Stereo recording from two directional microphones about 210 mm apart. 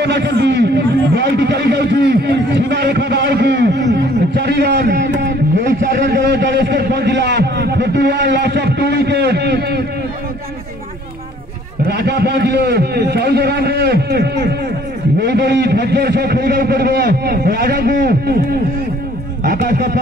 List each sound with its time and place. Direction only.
0.0 s a sound: 55° right (ahead or behind)
11.9 s a man's voice: 50° right (ahead or behind)
19.4 s speech: 45° right (ahead or behind)